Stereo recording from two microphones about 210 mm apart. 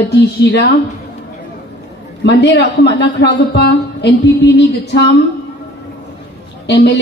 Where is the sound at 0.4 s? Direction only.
60° left (ahead or behind).